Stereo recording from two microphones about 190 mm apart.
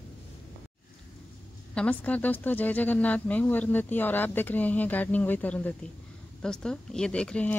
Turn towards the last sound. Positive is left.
turn(degrees=5)  # may be behind; listen again after turning